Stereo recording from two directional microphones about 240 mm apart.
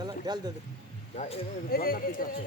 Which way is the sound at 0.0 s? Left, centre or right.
Centre.